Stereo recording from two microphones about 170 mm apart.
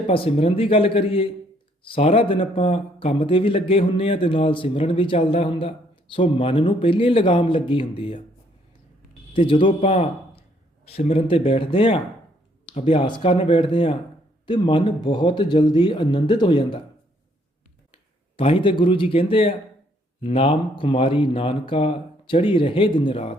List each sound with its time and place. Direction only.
0.1 s speech: 35° left (ahead or behind)
9.4 s speech: 30° left (ahead or behind)
17.9 s speech: 35° left (ahead or behind)